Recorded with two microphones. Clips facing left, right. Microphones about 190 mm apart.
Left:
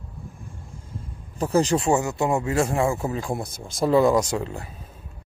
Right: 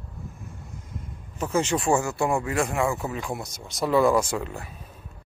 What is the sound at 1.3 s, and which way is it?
Speech, 35° left (ahead or behind).